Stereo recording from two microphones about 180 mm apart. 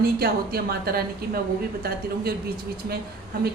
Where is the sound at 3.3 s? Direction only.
60° right (ahead or behind).